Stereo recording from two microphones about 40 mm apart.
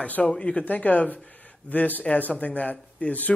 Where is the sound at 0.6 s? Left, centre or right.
Left.